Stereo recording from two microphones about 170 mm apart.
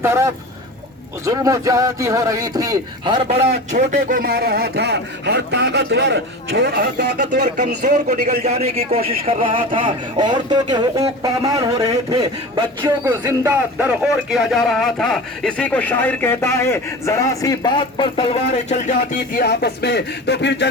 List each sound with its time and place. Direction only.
0.0 s a man's voice: 15° right (ahead or behind); by 3.8 s 40° right (ahead or behind)
3.9 s speech: 60° right (ahead or behind); by 6.8 s 80° right
7.2 s speech: 90° right
7.4 s a man's voice: 45° right (ahead or behind); by 12.9 s 25° right (ahead or behind)
13.1 s a man's voice: 10° right (ahead or behind); by 19.4 s 45° left (ahead or behind)
19.4 s speech: 75° left (ahead or behind)